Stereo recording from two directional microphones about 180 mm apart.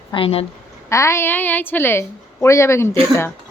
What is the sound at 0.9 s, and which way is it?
A woman's voice, 15° left (ahead or behind).